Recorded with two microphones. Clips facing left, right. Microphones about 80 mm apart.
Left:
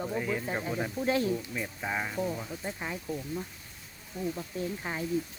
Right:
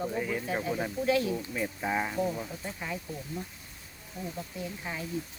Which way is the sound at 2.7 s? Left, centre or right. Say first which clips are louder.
Left 3 dB; centre.